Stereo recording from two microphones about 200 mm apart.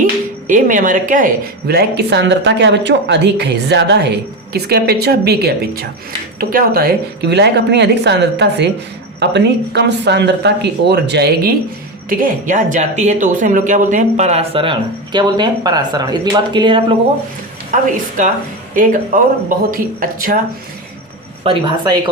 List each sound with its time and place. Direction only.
0.0 s speech: 40° right (ahead or behind)
12.0 s speech: 40° right (ahead or behind); by 16.8 s 25° right (ahead or behind)
17.7 s speech: 40° right (ahead or behind)
21.5 s speech: 30° right (ahead or behind)